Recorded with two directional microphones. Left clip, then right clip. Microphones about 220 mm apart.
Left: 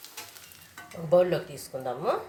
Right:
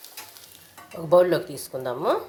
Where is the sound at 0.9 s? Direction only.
30° right (ahead or behind).